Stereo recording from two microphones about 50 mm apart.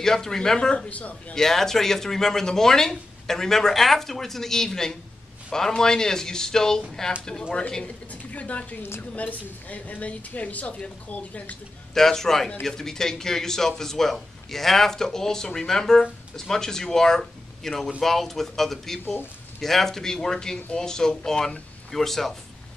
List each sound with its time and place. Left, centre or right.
0.0 s a man's voice: centre
0.8 s speech: left
1.3 s a man's voice: centre
7.5 s speech: left
11.9 s a man's voice: centre